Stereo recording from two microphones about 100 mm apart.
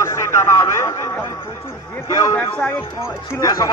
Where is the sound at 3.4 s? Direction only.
35° left (ahead or behind).